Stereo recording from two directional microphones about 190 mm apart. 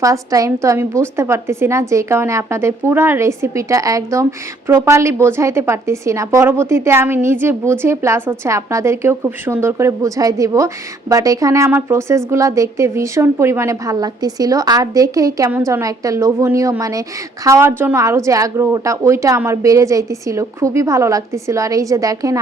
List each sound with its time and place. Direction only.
0.0 s a woman's voice: 15° right (ahead or behind)